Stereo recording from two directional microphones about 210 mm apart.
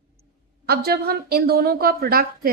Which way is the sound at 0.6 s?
45° right (ahead or behind).